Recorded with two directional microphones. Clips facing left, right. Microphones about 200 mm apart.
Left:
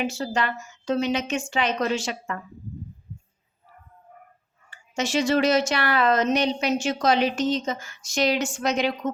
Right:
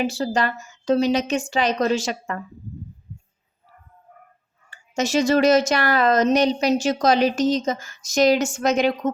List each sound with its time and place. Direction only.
0.0 s a woman's voice: 35° right (ahead or behind)
4.9 s a woman's voice: 40° right (ahead or behind)